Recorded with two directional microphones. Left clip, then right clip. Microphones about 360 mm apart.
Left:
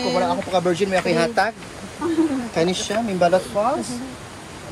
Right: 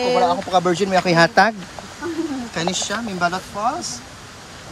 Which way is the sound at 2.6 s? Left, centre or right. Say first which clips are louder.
Left 1 dB; centre.